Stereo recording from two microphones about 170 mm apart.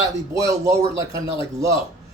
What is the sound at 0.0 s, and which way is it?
Speech, 20° right (ahead or behind).